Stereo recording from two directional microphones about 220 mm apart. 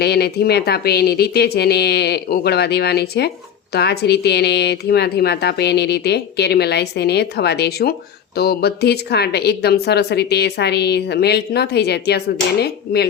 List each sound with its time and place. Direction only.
0.0 s a woman's voice: 45° left (ahead or behind)